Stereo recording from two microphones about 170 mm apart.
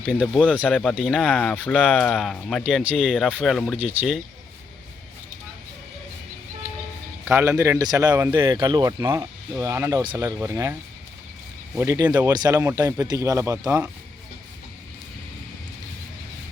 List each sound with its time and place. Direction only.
0.0 s speech: 5° right (ahead or behind)
7.3 s speech: 15° right (ahead or behind)
13.7 s speech: 5° right (ahead or behind)